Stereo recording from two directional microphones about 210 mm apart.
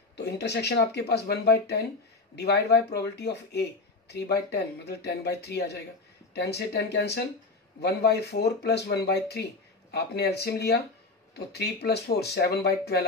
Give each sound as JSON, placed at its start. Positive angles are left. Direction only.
{"t": 0.2, "sound": "speech", "side_deg": 55}